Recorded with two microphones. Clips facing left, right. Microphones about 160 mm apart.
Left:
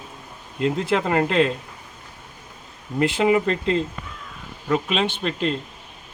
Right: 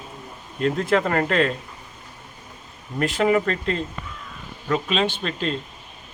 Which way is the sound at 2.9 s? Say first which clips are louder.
Left 1 dB; 15° left (ahead or behind).